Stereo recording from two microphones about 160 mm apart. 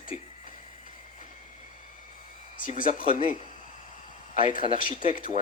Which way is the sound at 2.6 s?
55° left (ahead or behind).